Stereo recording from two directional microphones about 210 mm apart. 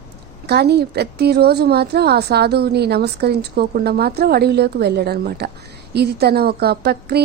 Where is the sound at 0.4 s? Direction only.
50° right (ahead or behind).